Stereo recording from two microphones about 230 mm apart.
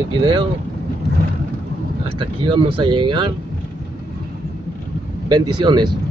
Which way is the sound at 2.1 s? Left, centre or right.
Right.